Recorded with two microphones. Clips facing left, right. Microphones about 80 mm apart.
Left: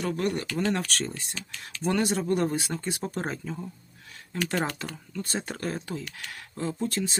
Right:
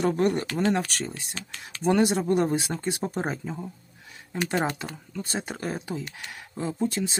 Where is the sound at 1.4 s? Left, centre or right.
Right.